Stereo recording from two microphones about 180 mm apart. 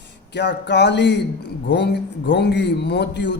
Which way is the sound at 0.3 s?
70° left (ahead or behind).